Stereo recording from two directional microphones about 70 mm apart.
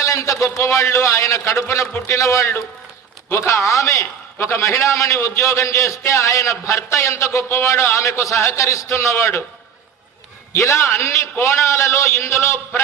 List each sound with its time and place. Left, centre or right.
0.0 s a man's voice: left
10.5 s a man's voice: left